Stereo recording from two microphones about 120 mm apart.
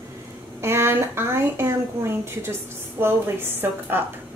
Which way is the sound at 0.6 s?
20° right (ahead or behind).